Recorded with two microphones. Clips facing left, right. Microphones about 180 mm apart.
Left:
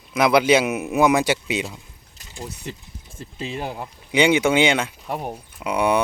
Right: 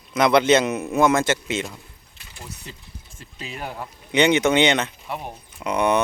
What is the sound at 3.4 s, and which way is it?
Speech, 30° left (ahead or behind).